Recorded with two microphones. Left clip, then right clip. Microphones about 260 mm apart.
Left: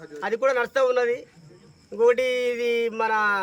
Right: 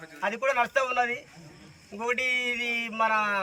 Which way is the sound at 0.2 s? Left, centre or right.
Centre.